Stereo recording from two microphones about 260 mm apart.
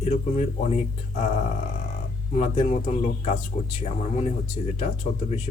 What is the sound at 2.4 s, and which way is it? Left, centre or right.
Speech, left.